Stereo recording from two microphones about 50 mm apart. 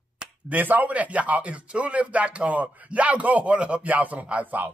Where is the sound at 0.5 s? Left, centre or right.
Right.